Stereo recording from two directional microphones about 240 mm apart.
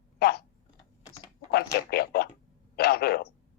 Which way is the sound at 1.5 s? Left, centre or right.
Left.